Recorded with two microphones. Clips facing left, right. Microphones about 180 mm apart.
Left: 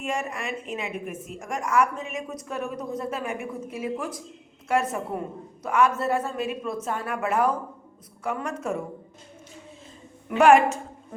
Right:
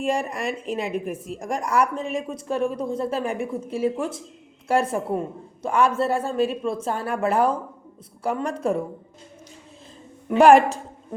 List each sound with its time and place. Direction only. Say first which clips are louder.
0.0 s a woman's voice: right 5 dB; 35° right (ahead or behind)
10.2 s a woman's voice: right 3 dB; 35° right (ahead or behind)